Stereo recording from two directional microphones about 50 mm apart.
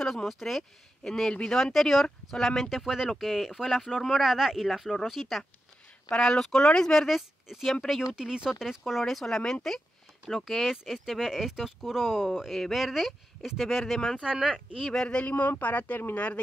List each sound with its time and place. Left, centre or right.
0.0 s speech: centre
6.0 s speech: centre
7.1 s speech: centre
7.6 s speech: centre
8.1 s speech: centre
14.2 s speech: centre
14.9 s speech: centre
15.1 s speech: left